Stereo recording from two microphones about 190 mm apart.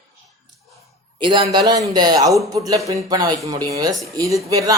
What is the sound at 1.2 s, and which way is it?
Speech, 25° right (ahead or behind).